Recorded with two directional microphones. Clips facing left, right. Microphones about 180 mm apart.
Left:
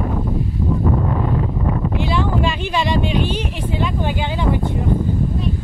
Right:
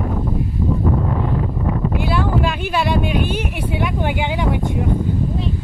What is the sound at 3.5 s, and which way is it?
Speech, 15° right (ahead or behind).